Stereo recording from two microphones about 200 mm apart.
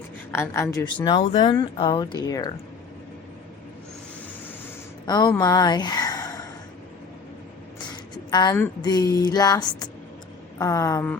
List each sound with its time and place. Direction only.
0.3 s a woman's voice: 15° left (ahead or behind)
5.0 s speech: 20° left (ahead or behind)
8.1 s a sound: 20° left (ahead or behind)
8.5 s a woman's voice: 15° left (ahead or behind)